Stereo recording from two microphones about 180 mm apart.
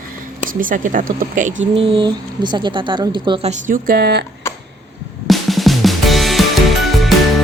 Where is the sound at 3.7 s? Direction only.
55° right (ahead or behind).